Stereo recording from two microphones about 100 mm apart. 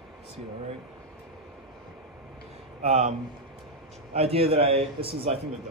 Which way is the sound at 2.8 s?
90° right.